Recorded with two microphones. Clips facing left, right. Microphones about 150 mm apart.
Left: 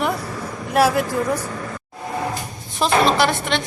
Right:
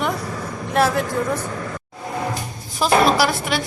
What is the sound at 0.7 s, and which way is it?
Speech, 5° left (ahead or behind).